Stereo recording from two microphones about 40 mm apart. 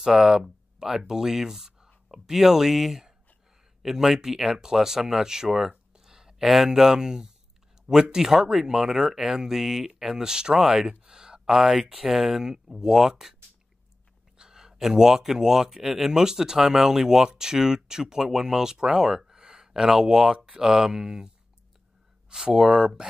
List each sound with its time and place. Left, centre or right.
0.0 s speech: centre
14.4 s speech: centre
22.3 s speech: centre